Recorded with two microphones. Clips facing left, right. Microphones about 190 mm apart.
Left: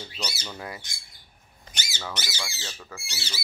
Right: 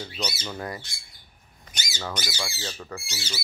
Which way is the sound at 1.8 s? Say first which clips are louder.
Right 3 dB; 10° right (ahead or behind).